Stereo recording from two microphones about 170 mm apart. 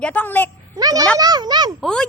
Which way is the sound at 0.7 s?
20° right (ahead or behind).